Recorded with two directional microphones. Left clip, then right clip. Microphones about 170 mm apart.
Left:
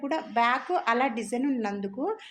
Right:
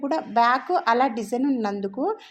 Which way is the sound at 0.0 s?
35° right (ahead or behind).